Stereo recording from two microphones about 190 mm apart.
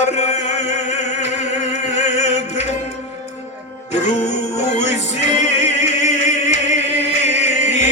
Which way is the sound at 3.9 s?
35° left (ahead or behind).